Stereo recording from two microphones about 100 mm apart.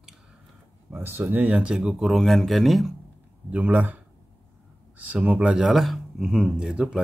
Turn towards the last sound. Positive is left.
turn(degrees=-5)  # may be behind; listen again after turning